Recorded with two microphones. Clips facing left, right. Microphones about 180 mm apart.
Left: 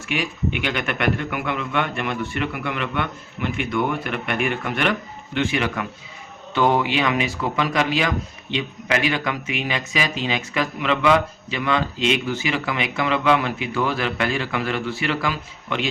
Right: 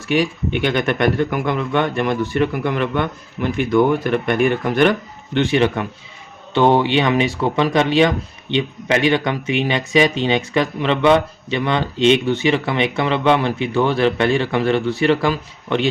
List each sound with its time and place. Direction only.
0.1 s speech: 35° right (ahead or behind)